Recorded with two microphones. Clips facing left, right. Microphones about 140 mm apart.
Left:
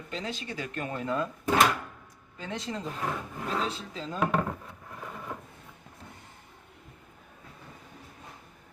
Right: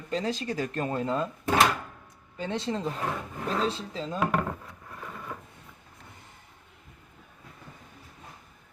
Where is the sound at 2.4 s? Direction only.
30° right (ahead or behind).